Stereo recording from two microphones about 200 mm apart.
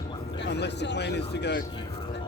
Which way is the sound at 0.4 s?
60° left (ahead or behind).